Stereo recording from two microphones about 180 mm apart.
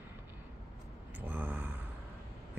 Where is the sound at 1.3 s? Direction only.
10° right (ahead or behind).